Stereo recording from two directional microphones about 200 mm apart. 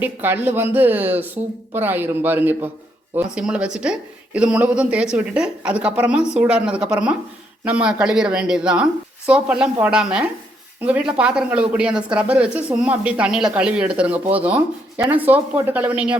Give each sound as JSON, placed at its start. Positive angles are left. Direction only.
{"t": 0.0, "sound": "speech", "side_deg": -10}